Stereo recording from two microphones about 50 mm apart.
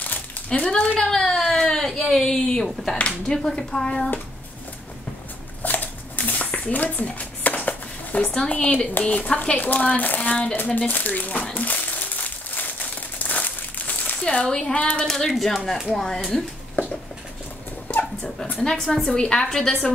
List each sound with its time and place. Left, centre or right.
0.5 s a sound: centre
3.3 s a woman's voice: centre
5.6 s a sound: left
7.1 s music: left
8.3 s speech: left
11.5 s crumpling: left
14.2 s a woman's voice: centre
16.8 s a sound: left
17.8 s dog: left
18.6 s a woman's voice: centre